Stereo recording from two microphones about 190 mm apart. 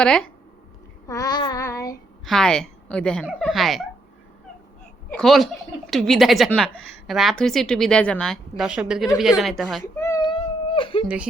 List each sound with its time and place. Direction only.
0.0 s speech: 5° left (ahead or behind)
1.0 s child singing: 20° left (ahead or behind)
2.2 s a woman's voice: 5° left (ahead or behind)
5.1 s speech: centre (ahead or behind)
9.8 s a sound: 15° left (ahead or behind)
10.8 s a sound: 25° left (ahead or behind)